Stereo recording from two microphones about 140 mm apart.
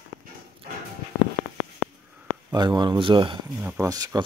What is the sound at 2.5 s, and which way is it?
Speech, 30° right (ahead or behind).